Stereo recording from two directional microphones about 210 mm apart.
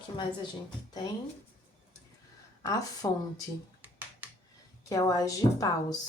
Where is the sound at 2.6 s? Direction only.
15° left (ahead or behind).